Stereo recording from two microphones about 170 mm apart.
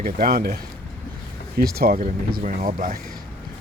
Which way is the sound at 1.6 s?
60° right (ahead or behind).